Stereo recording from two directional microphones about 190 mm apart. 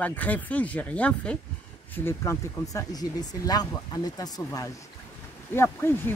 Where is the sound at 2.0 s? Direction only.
15° left (ahead or behind).